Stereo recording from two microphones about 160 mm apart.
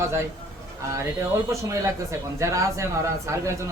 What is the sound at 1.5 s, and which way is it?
Speech, 20° right (ahead or behind).